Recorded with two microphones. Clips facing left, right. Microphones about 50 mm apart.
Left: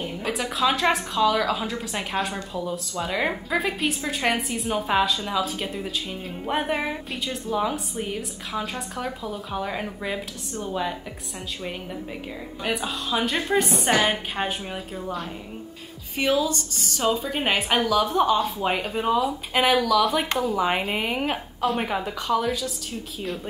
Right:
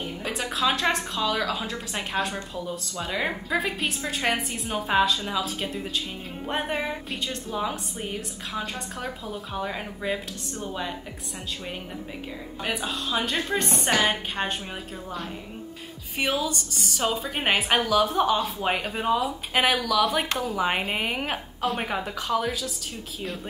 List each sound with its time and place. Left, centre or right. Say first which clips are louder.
0.0 s a woman's voice: left 3 dB; centre
12.6 s a woman's voice: left 2 dB; centre
16.2 s a woman's voice: left 4 dB; centre